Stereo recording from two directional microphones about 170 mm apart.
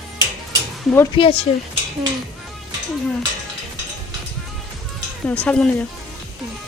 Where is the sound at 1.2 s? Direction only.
30° left (ahead or behind).